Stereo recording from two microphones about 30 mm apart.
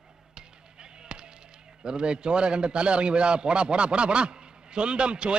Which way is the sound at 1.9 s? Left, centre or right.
Right.